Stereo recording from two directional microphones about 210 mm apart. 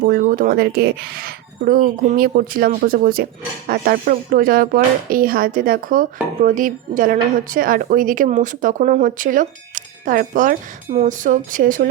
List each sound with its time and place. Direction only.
0.1 s a woman's voice: 45° right (ahead or behind)